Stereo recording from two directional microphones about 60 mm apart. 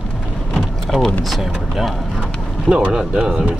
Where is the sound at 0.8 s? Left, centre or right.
Centre.